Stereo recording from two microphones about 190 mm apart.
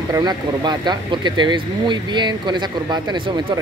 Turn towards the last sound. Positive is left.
turn(degrees=-25)  # may be behind; listen again after turning